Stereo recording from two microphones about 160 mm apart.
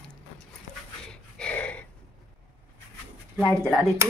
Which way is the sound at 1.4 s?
10° left (ahead or behind).